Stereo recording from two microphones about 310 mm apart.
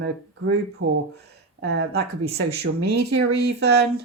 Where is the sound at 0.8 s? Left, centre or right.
Right.